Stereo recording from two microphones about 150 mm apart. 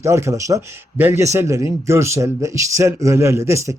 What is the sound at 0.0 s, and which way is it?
Speech, 20° right (ahead or behind).